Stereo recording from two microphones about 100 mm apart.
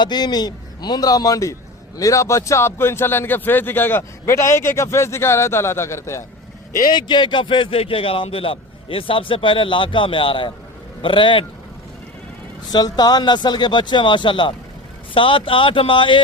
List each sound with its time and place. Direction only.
0.0 s a man's voice: 45° left (ahead or behind); by 6.2 s 30° left (ahead or behind)
6.8 s a man's voice: 45° left (ahead or behind)
12.7 s a man's voice: 40° left (ahead or behind)